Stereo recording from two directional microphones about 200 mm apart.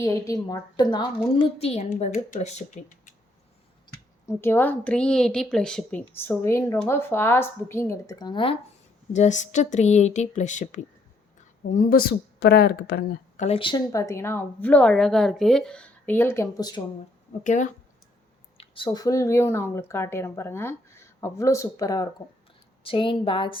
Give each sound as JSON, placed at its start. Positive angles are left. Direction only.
{"t": 0.0, "sound": "a woman's voice", "side_deg": 15}
{"t": 3.9, "sound": "clicking", "side_deg": 20}
{"t": 4.3, "sound": "speech", "side_deg": 10}
{"t": 9.1, "sound": "a woman's voice", "side_deg": 35}
{"t": 13.3, "sound": "speech", "side_deg": 35}
{"t": 17.4, "sound": "a woman's voice", "side_deg": 40}
{"t": 18.5, "sound": "a woman's voice", "side_deg": 25}